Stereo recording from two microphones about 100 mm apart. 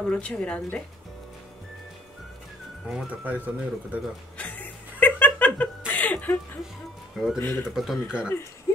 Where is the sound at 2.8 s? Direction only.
10° right (ahead or behind).